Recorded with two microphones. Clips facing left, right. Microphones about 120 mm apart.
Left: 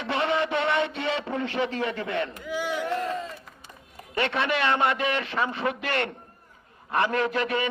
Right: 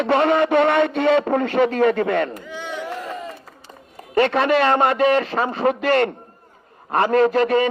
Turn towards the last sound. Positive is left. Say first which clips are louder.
# right 10 dB
turn(degrees=-40)  # may be behind; listen again after turning